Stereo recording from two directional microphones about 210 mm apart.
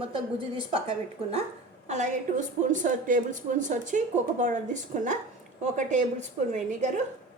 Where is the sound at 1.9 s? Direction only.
35° right (ahead or behind).